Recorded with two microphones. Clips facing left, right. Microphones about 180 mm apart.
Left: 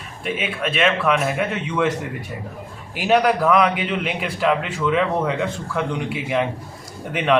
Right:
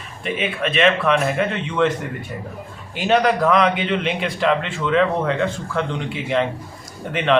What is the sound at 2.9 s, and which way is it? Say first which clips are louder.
A man's voice: even; 5° left (ahead or behind).